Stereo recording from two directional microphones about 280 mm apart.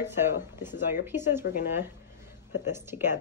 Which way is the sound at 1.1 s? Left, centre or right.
Centre.